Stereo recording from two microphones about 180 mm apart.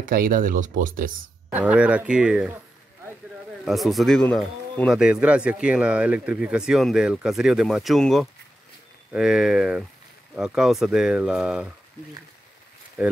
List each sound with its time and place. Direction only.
0.0 s speech: 50° right (ahead or behind)
1.5 s speech: 10° right (ahead or behind)
3.6 s speech: centre (ahead or behind)